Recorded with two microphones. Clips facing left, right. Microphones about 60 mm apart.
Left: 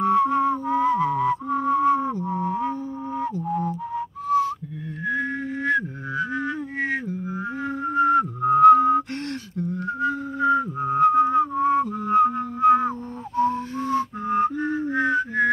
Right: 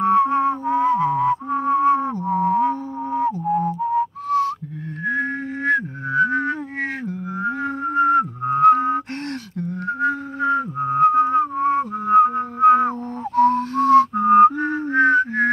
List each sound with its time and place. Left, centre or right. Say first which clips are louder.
0.0 s music: right 3 dB; right
3.1 s music: right 7 dB; right
4.3 s whistling: even; right
5.0 s a sound: right 3 dB; right
6.1 s music: right 7 dB; right
7.3 s music: right 7 dB; right
9.6 s a sound: right 3 dB; right
10.8 s music: right 3 dB; right
12.5 s music: right 4 dB; right